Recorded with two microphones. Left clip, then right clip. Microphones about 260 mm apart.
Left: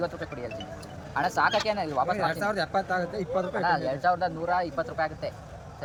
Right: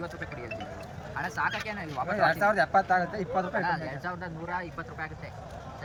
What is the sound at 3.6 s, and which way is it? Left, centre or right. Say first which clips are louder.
Speech: left 7 dB; left.